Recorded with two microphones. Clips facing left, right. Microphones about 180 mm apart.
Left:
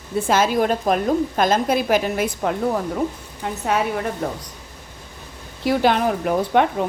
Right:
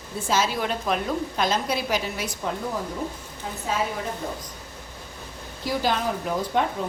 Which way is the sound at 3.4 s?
70° left (ahead or behind).